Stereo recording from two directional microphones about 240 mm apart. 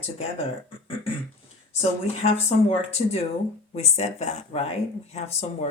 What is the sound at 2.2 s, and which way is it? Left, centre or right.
Speech, left.